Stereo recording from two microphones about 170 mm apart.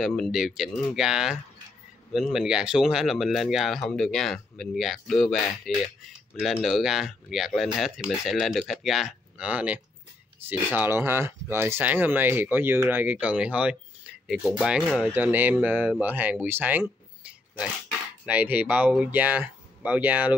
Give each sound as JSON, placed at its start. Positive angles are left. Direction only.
{"t": 0.0, "sound": "speech", "side_deg": 0}
{"t": 18.2, "sound": "speech", "side_deg": -10}